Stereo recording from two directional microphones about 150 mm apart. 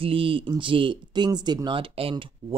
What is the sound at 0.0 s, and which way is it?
Speech, 35° right (ahead or behind).